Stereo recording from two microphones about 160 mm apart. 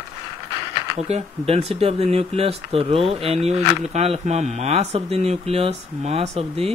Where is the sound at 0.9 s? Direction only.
40° right (ahead or behind).